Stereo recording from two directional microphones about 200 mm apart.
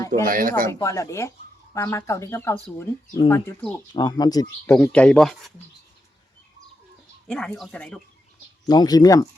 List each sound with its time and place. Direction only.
0.3 s speech: 45° right (ahead or behind)
0.7 s speech: 15° left (ahead or behind)
4.7 s speech: 5° left (ahead or behind)
7.3 s speech: 5° left (ahead or behind)
8.6 s speech: 20° left (ahead or behind)